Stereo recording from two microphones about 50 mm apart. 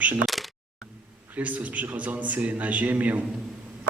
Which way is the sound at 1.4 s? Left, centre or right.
Right.